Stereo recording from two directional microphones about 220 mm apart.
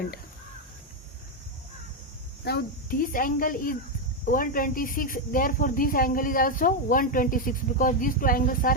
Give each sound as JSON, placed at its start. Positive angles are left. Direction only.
{"t": 2.4, "sound": "speech", "side_deg": 45}